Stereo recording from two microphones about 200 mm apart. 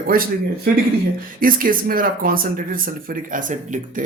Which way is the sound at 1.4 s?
45° right (ahead or behind).